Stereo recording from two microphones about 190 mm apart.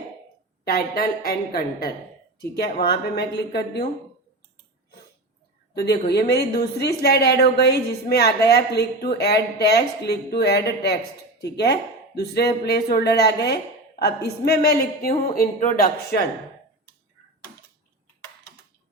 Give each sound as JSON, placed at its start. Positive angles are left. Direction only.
{"t": 0.6, "sound": "a woman's voice", "side_deg": 55}
{"t": 5.7, "sound": "a woman's voice", "side_deg": 60}